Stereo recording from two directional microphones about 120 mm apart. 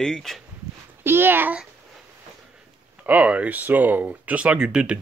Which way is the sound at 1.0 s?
20° right (ahead or behind).